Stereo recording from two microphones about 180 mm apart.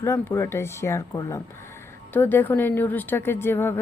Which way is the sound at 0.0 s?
15° left (ahead or behind).